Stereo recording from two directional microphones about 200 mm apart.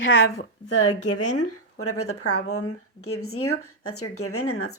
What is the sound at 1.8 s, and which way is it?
Speech, 90° left.